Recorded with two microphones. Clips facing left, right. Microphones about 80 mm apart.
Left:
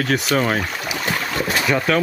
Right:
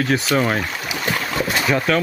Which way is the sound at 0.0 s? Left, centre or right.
Centre.